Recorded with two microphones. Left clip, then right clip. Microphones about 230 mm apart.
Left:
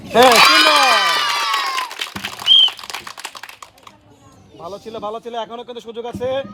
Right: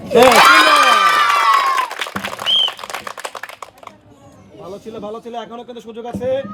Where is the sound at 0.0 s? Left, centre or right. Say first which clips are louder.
Right 1 dB; centre.